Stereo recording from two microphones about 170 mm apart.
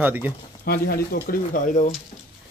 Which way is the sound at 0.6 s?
60° left (ahead or behind).